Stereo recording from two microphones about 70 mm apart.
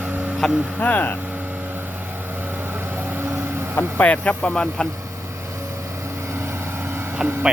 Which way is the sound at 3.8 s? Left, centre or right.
Left.